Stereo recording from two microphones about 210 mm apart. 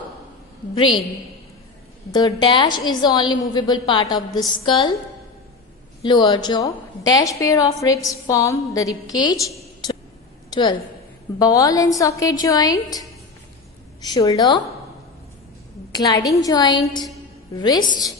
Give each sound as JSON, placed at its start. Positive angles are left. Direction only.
{"t": 2.1, "sound": "a woman's voice", "side_deg": 20}
{"t": 6.0, "sound": "a woman's voice", "side_deg": 25}
{"t": 10.5, "sound": "a woman's voice", "side_deg": 20}
{"t": 15.9, "sound": "a woman's voice", "side_deg": 15}